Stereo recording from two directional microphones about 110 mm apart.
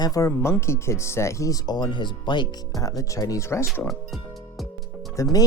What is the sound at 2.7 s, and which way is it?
Speech, 30° left (ahead or behind).